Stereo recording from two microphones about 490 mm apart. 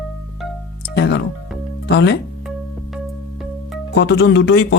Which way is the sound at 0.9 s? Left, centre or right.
Left.